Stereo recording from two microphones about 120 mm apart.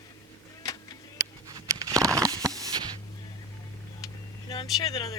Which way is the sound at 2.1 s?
30° right (ahead or behind).